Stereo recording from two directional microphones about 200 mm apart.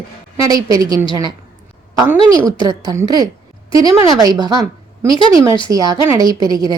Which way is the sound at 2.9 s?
20° right (ahead or behind).